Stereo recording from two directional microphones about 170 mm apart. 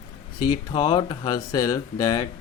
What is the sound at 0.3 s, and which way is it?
Speech, 25° left (ahead or behind).